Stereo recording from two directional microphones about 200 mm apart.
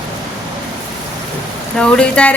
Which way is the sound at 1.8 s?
5° left (ahead or behind).